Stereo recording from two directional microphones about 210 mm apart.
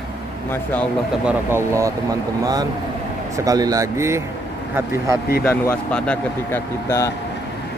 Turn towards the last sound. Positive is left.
turn(degrees=10)  # may be behind; listen again after turning